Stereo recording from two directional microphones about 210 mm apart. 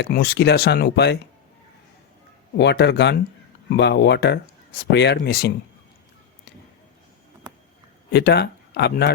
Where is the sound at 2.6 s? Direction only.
55° left (ahead or behind).